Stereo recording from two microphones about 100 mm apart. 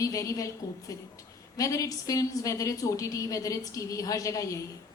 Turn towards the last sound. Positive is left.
turn(degrees=35)  # may be behind; listen again after turning